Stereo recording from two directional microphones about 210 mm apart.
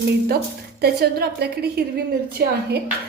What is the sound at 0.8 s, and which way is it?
A woman's voice, 50° right (ahead or behind).